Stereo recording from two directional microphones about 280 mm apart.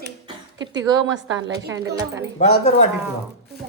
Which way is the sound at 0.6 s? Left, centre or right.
Right.